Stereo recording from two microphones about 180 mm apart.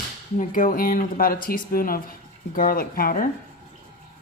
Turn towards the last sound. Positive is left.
turn(degrees=50)  # may be behind; listen again after turning